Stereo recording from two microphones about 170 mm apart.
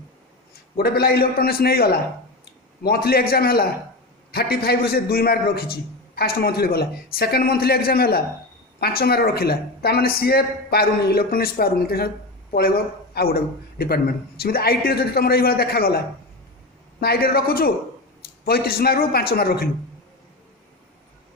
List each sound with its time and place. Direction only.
0.8 s speech: 65° left (ahead or behind)
17.0 s speech: 65° left (ahead or behind)